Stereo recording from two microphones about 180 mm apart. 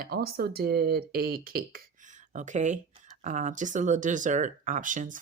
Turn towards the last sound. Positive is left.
turn(degrees=-45)  # may be behind; listen again after turning